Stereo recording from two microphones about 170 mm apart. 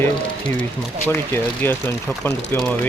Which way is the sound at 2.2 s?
10° left (ahead or behind).